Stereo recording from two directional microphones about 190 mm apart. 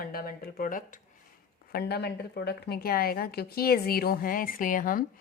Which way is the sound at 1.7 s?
55° left (ahead or behind).